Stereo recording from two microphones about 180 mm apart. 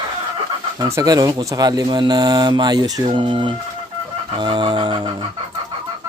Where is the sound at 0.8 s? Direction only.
20° right (ahead or behind).